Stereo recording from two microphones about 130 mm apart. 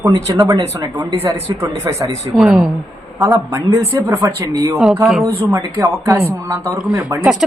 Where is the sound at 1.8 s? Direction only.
25° right (ahead or behind).